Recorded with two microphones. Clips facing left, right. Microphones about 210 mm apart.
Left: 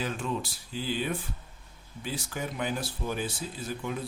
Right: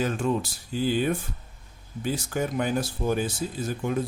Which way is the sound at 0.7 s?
50° right (ahead or behind).